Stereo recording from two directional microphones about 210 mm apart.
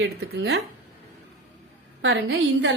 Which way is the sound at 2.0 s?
65° right (ahead or behind).